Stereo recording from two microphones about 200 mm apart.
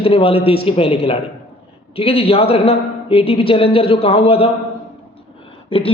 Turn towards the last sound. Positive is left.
turn(degrees=30)  # may be behind; listen again after turning